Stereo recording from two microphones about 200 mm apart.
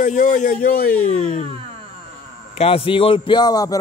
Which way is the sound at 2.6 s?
30° left (ahead or behind).